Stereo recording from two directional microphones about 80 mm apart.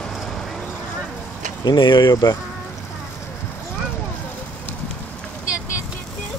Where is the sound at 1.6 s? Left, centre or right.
Left.